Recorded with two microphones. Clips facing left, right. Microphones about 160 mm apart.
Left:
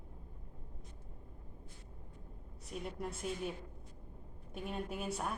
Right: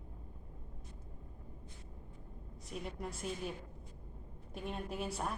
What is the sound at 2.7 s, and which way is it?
Speech, centre (ahead or behind).